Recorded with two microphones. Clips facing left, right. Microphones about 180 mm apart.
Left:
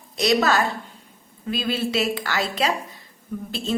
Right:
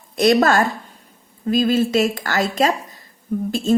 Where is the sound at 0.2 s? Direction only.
50° right (ahead or behind).